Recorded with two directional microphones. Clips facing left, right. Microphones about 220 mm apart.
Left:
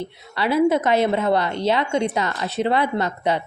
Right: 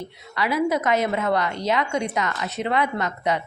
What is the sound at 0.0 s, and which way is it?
A woman's voice, 30° left (ahead or behind).